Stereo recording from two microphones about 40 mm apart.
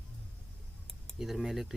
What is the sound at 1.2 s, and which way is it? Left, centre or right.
Speech, centre.